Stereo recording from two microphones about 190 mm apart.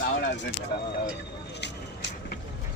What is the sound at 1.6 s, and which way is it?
Vehicle, 65° left (ahead or behind).